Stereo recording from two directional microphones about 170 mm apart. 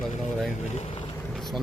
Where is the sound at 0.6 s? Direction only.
40° left (ahead or behind).